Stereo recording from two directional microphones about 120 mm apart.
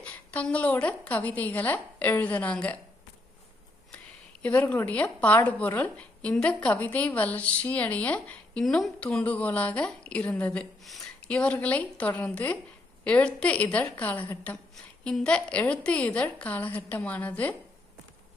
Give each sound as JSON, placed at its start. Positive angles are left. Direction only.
{"t": 0.0, "sound": "a woman's voice", "side_deg": 10}
{"t": 4.4, "sound": "a woman's voice", "side_deg": 15}